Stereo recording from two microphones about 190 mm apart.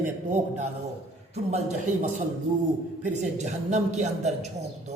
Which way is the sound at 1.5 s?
40° right (ahead or behind).